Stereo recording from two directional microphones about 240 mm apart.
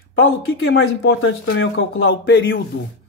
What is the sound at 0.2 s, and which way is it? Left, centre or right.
Speech, left.